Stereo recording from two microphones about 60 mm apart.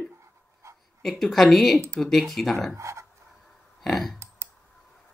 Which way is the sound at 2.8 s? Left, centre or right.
Right.